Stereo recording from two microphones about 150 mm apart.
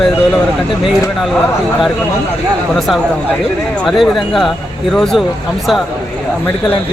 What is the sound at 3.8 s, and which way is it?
Speech, centre (ahead or behind).